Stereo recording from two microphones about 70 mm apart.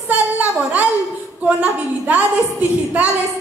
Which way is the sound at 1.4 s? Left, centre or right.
Right.